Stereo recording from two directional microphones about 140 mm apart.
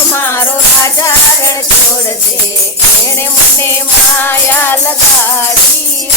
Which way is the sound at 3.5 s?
15° left (ahead or behind).